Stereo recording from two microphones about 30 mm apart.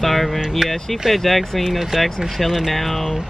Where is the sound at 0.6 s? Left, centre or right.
Right.